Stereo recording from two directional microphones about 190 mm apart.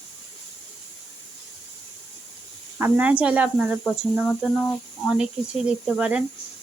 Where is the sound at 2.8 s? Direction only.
5° right (ahead or behind).